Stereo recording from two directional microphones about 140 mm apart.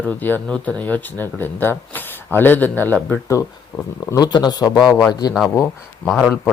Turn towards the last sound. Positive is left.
turn(degrees=0)  # may be behind; listen again after turning